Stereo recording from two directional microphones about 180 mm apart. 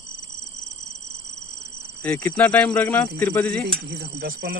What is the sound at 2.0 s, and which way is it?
Speech, 10° left (ahead or behind).